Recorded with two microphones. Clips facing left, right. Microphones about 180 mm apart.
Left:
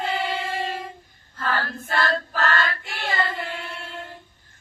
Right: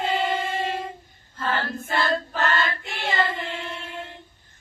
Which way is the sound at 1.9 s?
20° right (ahead or behind).